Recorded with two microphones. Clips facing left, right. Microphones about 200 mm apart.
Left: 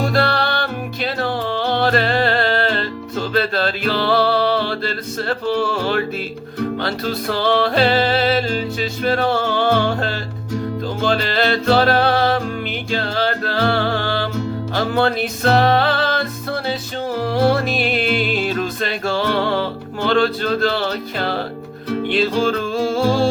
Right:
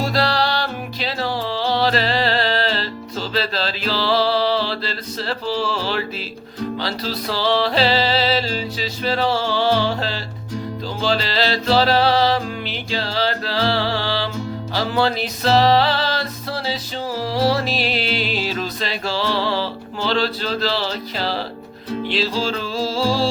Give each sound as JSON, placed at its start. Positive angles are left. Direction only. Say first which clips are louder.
{"t": 0.0, "sound": "music", "louder": "left 2 dB", "side_deg": 55}